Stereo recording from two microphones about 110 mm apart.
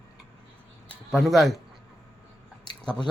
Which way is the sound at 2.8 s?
5° left (ahead or behind).